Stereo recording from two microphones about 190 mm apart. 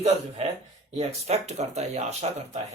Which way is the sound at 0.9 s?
35° right (ahead or behind).